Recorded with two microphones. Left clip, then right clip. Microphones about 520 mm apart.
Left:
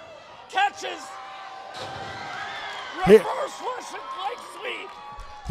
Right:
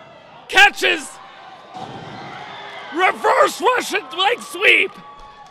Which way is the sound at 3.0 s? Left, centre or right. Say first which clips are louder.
Right 3 dB; right.